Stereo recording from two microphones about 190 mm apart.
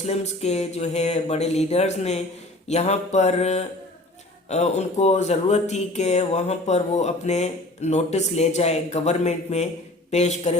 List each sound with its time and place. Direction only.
0.0 s speech: 35° left (ahead or behind)